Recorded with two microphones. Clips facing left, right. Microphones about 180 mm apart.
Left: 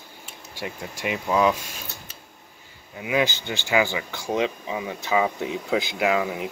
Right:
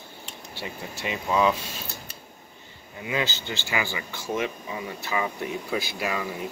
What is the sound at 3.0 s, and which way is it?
Speech, 15° left (ahead or behind).